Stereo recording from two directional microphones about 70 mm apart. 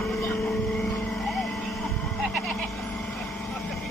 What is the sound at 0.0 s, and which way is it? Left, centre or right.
Vehicle, centre.